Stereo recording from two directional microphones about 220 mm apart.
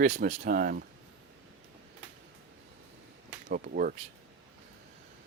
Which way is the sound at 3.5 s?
40° right (ahead or behind).